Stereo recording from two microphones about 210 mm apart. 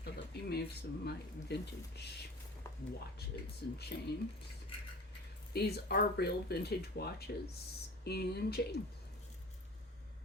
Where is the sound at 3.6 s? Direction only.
50° left (ahead or behind).